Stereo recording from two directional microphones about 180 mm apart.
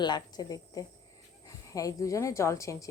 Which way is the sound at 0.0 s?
25° left (ahead or behind).